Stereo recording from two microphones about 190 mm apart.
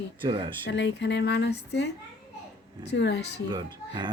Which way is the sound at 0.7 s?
65° left (ahead or behind).